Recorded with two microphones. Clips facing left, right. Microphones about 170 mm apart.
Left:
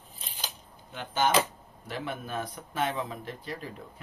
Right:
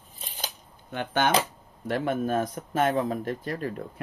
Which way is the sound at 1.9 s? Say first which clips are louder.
Right 9 dB; 45° right (ahead or behind).